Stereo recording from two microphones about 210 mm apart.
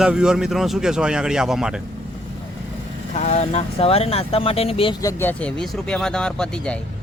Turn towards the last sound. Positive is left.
turn(degrees=5)  # may be behind; listen again after turning